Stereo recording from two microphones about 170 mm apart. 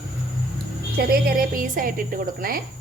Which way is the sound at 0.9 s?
55° right (ahead or behind).